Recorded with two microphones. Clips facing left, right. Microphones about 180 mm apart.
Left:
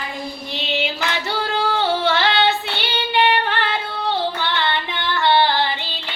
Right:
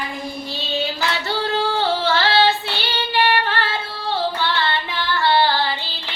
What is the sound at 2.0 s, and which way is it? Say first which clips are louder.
Female singing: right 3 dB; 20° left (ahead or behind).